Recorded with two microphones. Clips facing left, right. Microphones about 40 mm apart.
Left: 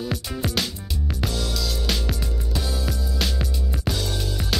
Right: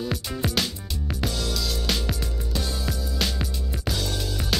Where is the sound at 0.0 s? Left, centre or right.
Centre.